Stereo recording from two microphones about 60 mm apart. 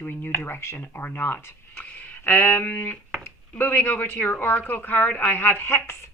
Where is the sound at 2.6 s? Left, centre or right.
Left.